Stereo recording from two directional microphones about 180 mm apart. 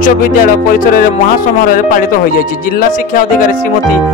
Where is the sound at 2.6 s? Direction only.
50° left (ahead or behind).